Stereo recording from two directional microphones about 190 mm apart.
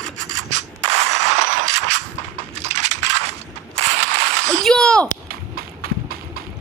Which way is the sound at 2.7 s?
35° right (ahead or behind).